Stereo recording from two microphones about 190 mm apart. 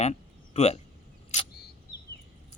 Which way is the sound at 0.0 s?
35° left (ahead or behind).